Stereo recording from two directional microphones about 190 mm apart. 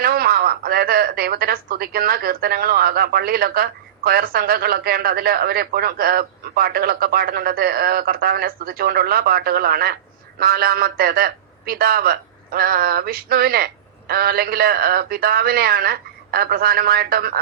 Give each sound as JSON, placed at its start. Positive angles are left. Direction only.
{"t": 0.0, "sound": "speech", "side_deg": -50}